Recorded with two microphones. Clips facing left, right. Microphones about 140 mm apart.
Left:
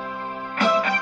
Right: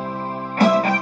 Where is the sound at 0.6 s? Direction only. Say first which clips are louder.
Right 5 dB; 35° right (ahead or behind).